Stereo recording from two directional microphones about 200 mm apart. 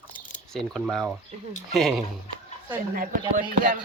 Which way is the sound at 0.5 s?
5° left (ahead or behind).